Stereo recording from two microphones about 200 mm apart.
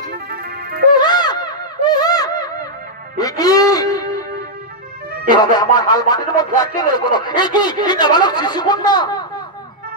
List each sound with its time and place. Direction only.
0.1 s music: 50° right (ahead or behind)
0.9 s a sound: 20° left (ahead or behind)
3.2 s music: 20° left (ahead or behind)
5.3 s speech: 20° left (ahead or behind)